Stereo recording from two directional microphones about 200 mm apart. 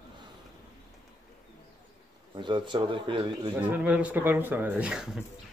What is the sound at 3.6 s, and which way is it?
Speech, 5° right (ahead or behind).